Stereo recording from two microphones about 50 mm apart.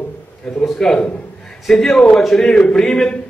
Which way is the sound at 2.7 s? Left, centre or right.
Centre.